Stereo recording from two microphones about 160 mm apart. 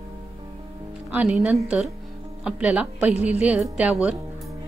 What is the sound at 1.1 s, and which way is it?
Speech, 10° right (ahead or behind).